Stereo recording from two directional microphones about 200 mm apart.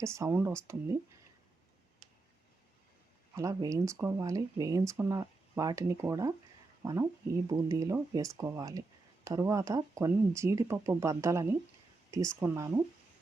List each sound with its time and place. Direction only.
0.0 s speech: 15° right (ahead or behind)
3.3 s speech: 15° right (ahead or behind)